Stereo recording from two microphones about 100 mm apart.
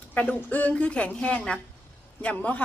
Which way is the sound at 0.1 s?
15° left (ahead or behind).